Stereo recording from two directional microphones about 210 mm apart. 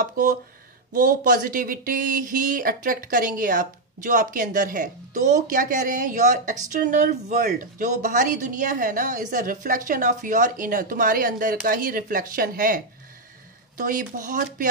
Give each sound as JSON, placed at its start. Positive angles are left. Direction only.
{"t": 0.0, "sound": "speech", "side_deg": -40}